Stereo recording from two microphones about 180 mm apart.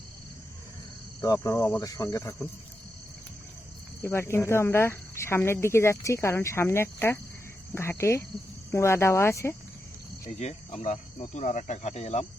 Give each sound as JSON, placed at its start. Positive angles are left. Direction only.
{"t": 1.2, "sound": "speech", "side_deg": 20}
{"t": 4.0, "sound": "speech", "side_deg": 15}
{"t": 10.2, "sound": "speech", "side_deg": 40}